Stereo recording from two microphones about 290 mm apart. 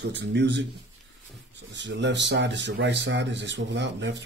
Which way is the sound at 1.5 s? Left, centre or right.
Right.